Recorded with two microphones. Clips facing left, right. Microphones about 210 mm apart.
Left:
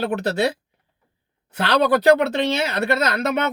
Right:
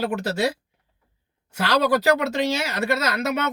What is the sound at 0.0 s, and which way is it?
Speech, 5° right (ahead or behind).